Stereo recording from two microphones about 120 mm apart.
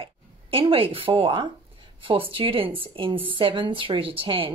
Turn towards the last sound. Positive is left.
turn(degrees=-50)  # may be behind; listen again after turning